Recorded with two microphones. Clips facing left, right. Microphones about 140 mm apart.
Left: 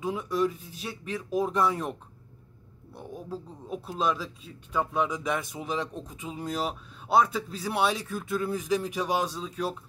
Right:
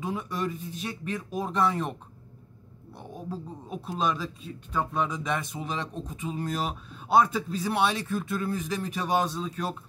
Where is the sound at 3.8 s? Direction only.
5° left (ahead or behind).